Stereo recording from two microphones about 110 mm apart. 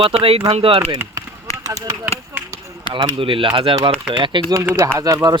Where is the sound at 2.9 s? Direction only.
40° right (ahead or behind).